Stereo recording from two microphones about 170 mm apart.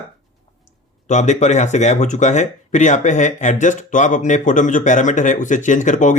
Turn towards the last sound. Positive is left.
turn(degrees=45)  # may be behind; listen again after turning